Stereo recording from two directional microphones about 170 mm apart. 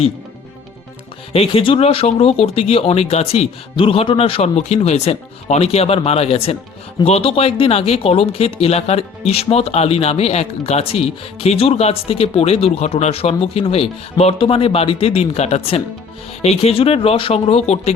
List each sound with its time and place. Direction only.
1.3 s speech: 35° left (ahead or behind)